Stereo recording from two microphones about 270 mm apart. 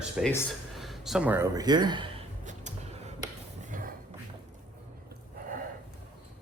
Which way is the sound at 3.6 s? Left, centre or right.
Right.